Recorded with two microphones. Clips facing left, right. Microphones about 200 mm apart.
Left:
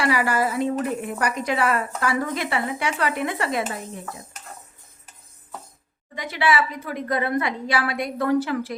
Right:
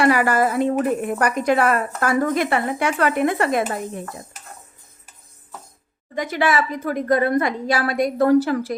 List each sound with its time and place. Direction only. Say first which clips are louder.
0.0 s speech: right 5 dB; 50° right (ahead or behind)
6.1 s speech: right 2 dB; 45° right (ahead or behind)